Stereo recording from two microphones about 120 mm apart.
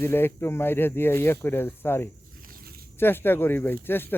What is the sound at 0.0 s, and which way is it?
Speech, 20° left (ahead or behind).